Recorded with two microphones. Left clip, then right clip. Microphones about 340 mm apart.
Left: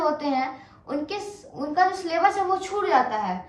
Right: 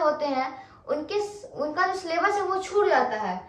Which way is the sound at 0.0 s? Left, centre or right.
Centre.